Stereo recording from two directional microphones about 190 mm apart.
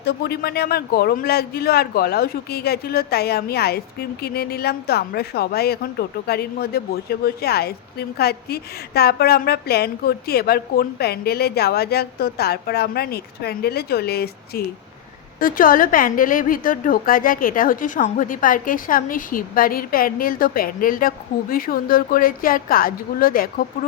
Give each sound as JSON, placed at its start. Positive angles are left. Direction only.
{"t": 0.0, "sound": "a woman's voice", "side_deg": 55}